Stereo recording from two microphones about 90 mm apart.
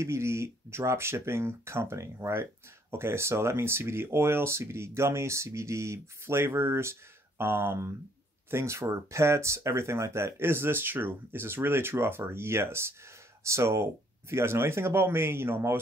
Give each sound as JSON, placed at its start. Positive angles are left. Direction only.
{"t": 0.0, "sound": "speech", "side_deg": -30}